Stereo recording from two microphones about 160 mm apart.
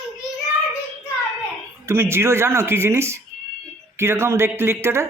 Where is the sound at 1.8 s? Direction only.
15° right (ahead or behind).